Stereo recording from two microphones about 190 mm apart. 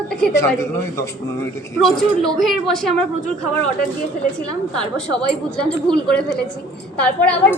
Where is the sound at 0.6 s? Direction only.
15° left (ahead or behind).